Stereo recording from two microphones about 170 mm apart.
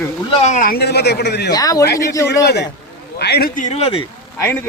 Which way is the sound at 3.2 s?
75° left (ahead or behind).